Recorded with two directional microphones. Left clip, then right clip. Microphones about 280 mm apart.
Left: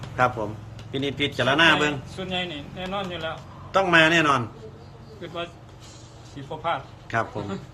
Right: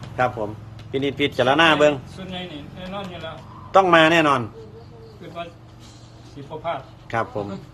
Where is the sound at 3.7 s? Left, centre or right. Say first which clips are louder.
Right 4 dB; centre.